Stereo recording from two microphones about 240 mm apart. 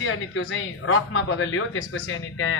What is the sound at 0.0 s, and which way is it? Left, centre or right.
A man's voice, left.